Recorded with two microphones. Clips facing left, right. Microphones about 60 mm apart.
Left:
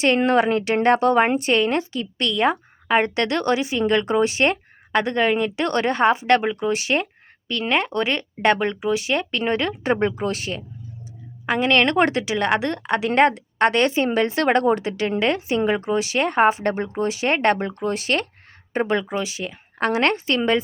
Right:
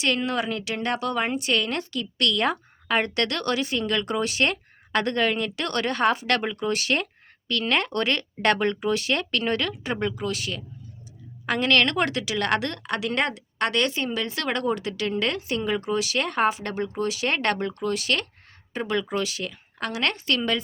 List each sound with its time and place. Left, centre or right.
0.0 s a woman's voice: left
9.8 s speech: left
11.4 s a woman's voice: centre
19.8 s a woman's voice: left